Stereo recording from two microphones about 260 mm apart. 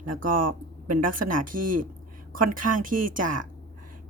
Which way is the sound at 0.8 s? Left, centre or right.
Right.